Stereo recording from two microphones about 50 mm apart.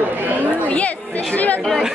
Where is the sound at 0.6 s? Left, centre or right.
Left.